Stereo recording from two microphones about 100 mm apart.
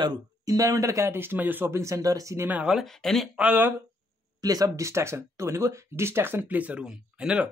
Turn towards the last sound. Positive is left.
turn(degrees=-10)  # may be behind; listen again after turning